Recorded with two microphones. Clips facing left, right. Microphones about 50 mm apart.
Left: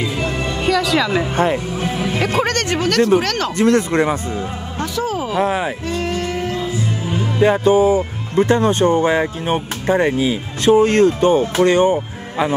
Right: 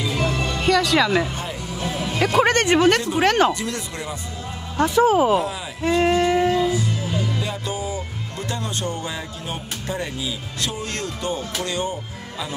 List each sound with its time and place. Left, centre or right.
0.1 s music: centre
0.7 s a woman's voice: centre
1.3 s speech: left
1.9 s music: left
2.4 s speech: right
3.5 s speech: left
4.7 s speech: right
5.4 s speech: left
5.9 s a sound: right
7.1 s speech: left